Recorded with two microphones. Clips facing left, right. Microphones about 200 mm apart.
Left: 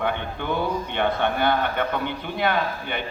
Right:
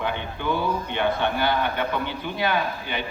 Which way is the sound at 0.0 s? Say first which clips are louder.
Left 1 dB; 55° left (ahead or behind).